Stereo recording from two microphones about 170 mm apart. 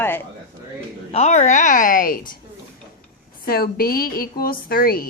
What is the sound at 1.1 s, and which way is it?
A woman's voice, 40° left (ahead or behind).